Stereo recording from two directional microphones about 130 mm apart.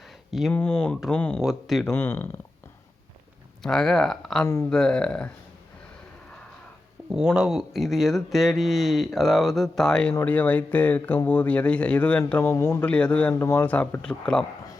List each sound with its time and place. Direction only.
0.3 s speech: centre (ahead or behind)
0.5 s speech: 10° left (ahead or behind)
1.4 s speech: centre (ahead or behind)
1.8 s speech: 15° left (ahead or behind)
3.6 s speech: 5° left (ahead or behind)
7.3 s speech: 5° right (ahead or behind)
12.5 s a man's voice: 20° left (ahead or behind)
12.8 s speech: 10° left (ahead or behind)
13.4 s a man's voice: 20° left (ahead or behind)
13.7 s speech: 10° left (ahead or behind)